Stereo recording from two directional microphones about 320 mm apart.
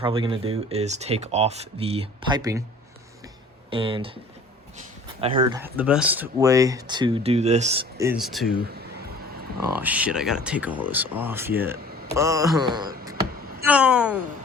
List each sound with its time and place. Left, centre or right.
0.0 s speech: centre
3.7 s speech: centre
5.2 s speech: centre
9.8 s speech: centre